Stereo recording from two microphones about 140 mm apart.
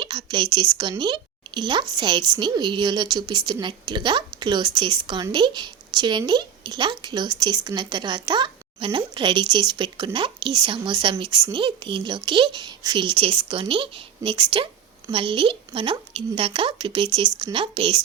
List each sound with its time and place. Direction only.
0.0 s a woman's voice: 30° right (ahead or behind)